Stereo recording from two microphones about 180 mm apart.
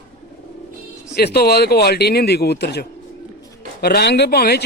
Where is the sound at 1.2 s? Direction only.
60° left (ahead or behind).